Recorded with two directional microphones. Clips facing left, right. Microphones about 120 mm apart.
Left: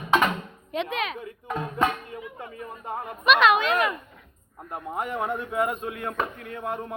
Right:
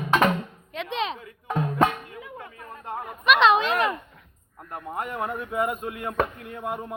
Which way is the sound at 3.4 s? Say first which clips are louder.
Right 2 dB; 30° right (ahead or behind).